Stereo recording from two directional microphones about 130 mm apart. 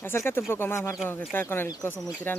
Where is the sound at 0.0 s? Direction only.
20° left (ahead or behind).